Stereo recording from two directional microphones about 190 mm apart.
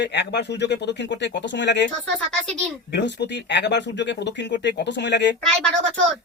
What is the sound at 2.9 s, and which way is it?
Speech, 65° left (ahead or behind).